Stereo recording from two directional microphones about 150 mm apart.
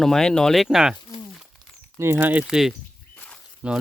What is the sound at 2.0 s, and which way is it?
Speech, 15° right (ahead or behind).